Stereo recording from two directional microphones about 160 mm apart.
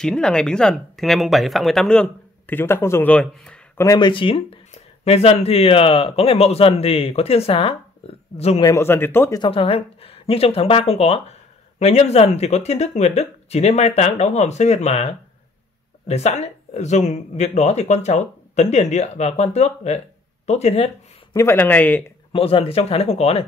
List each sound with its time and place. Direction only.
0.0 s speech: 5° left (ahead or behind)
3.8 s speech: 25° left (ahead or behind); by 8.6 s 40° left (ahead or behind)
8.6 s speech: 15° left (ahead or behind)
9.4 s speech: 35° left (ahead or behind)
21.3 s speech: 15° left (ahead or behind)
22.3 s speech: 35° left (ahead or behind)